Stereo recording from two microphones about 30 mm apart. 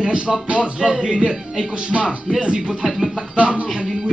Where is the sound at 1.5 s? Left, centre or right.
Right.